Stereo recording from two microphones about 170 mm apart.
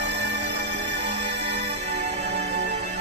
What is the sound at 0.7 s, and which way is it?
Music, 40° right (ahead or behind).